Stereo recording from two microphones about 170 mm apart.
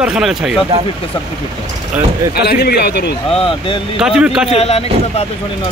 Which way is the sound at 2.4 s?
70° left (ahead or behind).